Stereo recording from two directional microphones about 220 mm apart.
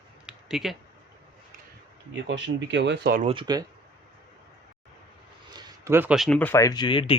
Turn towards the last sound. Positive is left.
turn(degrees=25)  # may be behind; listen again after turning